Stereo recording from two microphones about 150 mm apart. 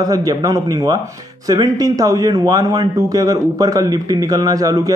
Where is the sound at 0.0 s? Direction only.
25° right (ahead or behind).